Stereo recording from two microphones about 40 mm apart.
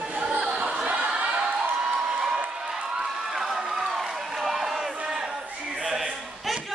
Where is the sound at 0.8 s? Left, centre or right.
Right.